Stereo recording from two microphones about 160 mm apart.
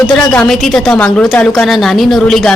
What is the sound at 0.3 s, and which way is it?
A woman's voice, 5° left (ahead or behind).